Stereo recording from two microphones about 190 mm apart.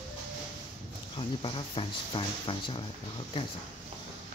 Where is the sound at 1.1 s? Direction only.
30° left (ahead or behind).